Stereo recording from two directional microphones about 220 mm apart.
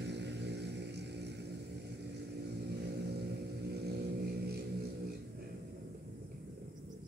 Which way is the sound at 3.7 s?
45° right (ahead or behind).